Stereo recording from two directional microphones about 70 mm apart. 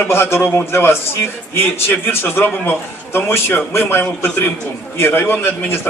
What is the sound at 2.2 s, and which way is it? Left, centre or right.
A man's voice, left.